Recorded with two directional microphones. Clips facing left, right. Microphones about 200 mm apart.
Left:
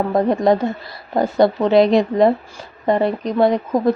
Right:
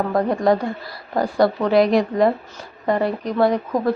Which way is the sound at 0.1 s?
20° left (ahead or behind).